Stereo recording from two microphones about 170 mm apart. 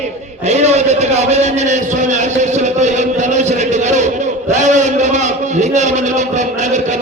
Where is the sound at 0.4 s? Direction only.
40° right (ahead or behind).